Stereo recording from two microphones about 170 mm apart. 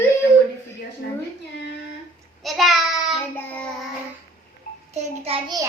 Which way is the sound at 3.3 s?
10° left (ahead or behind).